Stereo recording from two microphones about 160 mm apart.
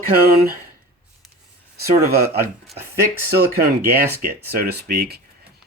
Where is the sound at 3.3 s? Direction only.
75° right (ahead or behind).